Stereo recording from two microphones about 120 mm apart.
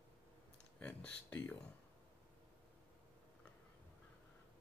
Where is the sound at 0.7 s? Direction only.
10° left (ahead or behind).